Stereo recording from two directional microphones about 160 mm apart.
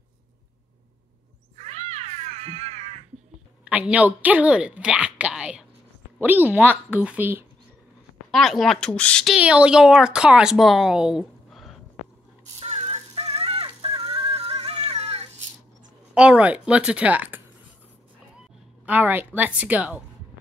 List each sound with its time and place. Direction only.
1.6 s cat: 45° right (ahead or behind)
3.6 s speech: 5° right (ahead or behind)
8.3 s speech: centre (ahead or behind)
12.5 s music: 45° right (ahead or behind)
16.2 s speech: 10° right (ahead or behind)
18.9 s speech: 10° right (ahead or behind)